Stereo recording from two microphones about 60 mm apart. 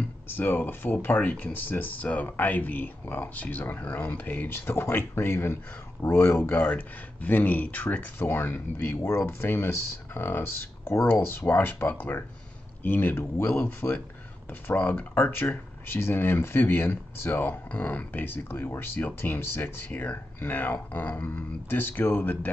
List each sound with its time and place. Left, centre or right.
0.3 s speech: left
4.5 s speech: left
17.6 s speech: left
21.6 s speech: left